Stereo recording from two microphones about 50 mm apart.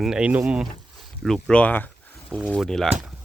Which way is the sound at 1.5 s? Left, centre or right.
Left.